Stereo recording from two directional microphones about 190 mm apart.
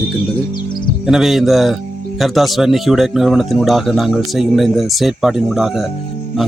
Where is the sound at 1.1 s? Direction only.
Centre (ahead or behind).